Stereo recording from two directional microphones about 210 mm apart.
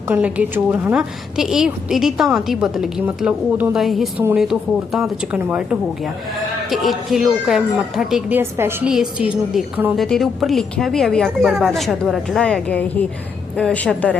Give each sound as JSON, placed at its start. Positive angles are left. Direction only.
{"t": 0.1, "sound": "a woman's voice", "side_deg": -5}